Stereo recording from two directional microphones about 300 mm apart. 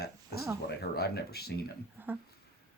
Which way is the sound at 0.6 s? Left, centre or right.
Left.